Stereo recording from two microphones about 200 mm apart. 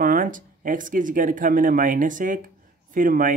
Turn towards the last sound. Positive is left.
turn(degrees=-40)  # may be behind; listen again after turning